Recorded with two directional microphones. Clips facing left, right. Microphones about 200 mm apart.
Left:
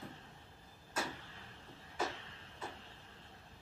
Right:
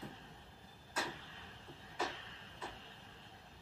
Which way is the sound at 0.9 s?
45° left (ahead or behind).